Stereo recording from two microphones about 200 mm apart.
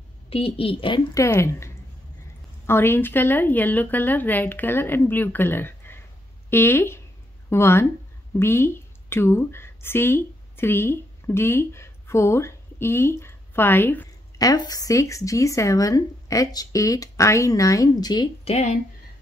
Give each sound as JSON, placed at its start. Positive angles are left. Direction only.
{"t": 0.3, "sound": "a woman's voice", "side_deg": 30}
{"t": 18.5, "sound": "speech", "side_deg": 35}